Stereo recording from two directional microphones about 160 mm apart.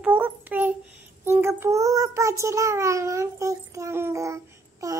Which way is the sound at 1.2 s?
15° right (ahead or behind).